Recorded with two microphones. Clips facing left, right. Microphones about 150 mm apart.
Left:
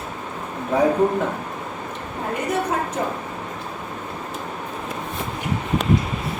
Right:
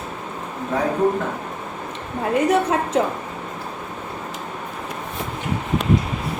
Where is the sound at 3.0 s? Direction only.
90° right.